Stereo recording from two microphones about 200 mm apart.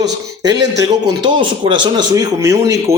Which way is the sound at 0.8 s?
25° right (ahead or behind).